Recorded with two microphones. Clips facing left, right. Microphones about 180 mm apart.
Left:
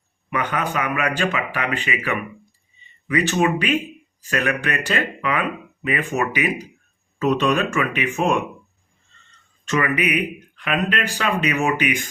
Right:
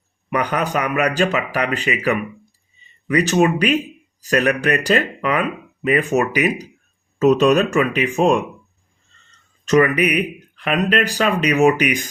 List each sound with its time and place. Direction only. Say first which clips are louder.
0.3 s speech: right 4 dB; 40° right (ahead or behind)
9.9 s speech: right 3 dB; 40° right (ahead or behind)